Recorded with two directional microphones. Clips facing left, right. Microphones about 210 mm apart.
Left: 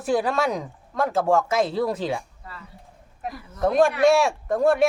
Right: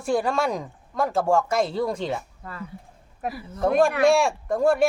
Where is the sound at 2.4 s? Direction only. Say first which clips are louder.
Right 4 dB; 55° right (ahead or behind).